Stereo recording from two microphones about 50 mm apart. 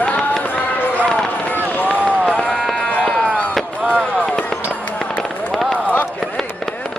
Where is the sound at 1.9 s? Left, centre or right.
Right.